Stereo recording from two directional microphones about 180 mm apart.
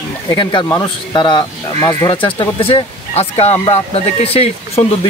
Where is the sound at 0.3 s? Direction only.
25° left (ahead or behind).